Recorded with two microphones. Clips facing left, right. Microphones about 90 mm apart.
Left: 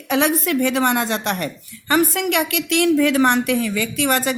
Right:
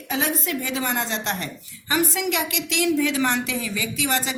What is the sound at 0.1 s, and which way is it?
A woman's voice, 70° left (ahead or behind).